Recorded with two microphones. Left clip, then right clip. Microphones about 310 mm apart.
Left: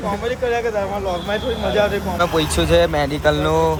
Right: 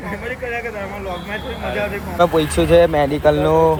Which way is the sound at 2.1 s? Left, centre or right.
Centre.